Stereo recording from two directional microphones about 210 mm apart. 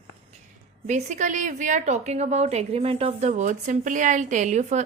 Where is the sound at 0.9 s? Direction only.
35° right (ahead or behind).